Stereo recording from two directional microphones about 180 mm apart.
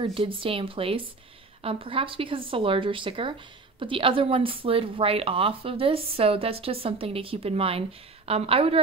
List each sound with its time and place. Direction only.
0.0 s a woman's voice: 30° right (ahead or behind)